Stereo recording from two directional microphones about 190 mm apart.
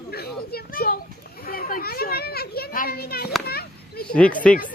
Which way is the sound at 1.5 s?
50° left (ahead or behind).